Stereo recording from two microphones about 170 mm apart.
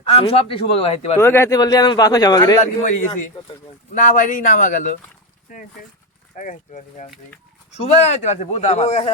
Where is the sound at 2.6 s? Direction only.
45° left (ahead or behind).